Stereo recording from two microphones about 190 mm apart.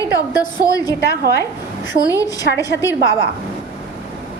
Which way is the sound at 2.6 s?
15° left (ahead or behind).